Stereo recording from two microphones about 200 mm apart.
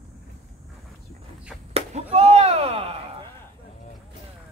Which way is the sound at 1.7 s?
30° right (ahead or behind).